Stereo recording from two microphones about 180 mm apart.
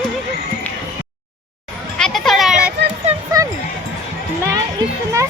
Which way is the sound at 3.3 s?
20° right (ahead or behind).